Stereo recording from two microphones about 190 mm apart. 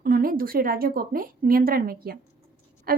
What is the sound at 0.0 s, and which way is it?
A woman's voice, 50° right (ahead or behind).